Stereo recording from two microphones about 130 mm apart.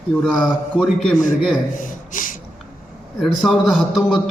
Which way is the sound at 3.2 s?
Centre (ahead or behind).